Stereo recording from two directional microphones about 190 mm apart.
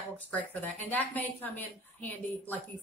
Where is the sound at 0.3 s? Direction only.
10° left (ahead or behind).